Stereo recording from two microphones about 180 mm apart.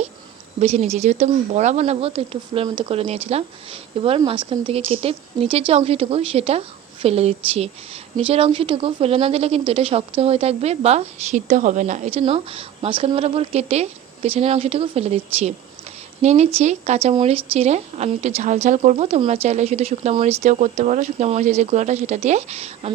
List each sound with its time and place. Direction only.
0.6 s a woman's voice: 35° right (ahead or behind)